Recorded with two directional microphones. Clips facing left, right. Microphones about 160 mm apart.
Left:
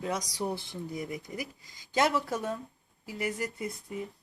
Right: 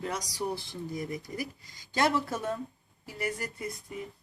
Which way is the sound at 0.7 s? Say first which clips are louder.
Right 1 dB; 15° left (ahead or behind).